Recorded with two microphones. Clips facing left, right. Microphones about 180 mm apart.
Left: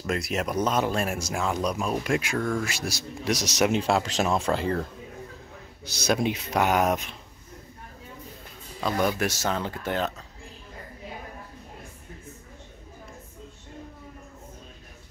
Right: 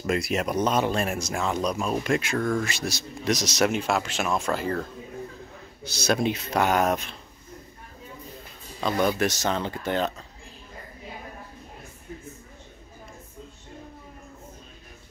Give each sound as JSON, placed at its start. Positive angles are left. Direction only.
{"t": 0.1, "sound": "speech", "side_deg": 0}
{"t": 3.7, "sound": "speech", "side_deg": 30}
{"t": 5.9, "sound": "speech", "side_deg": 15}
{"t": 8.8, "sound": "speech", "side_deg": 5}